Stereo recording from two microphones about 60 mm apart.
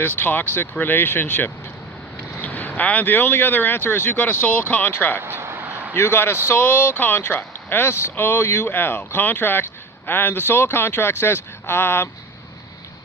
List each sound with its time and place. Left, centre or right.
0.0 s speech: left
5.2 s vehicle: right
5.9 s speech: left